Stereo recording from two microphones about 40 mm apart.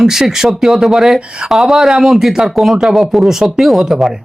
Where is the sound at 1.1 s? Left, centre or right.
Right.